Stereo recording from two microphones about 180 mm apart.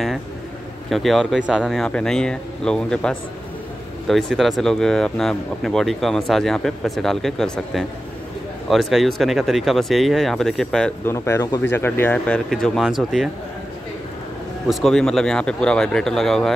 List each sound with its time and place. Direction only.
0.8 s speech: centre (ahead or behind)
11.1 s speech: 15° left (ahead or behind); by 13.3 s centre (ahead or behind)
14.7 s speech: centre (ahead or behind)